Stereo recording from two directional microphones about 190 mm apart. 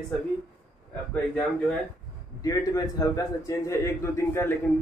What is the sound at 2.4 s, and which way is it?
A man's voice, 20° left (ahead or behind).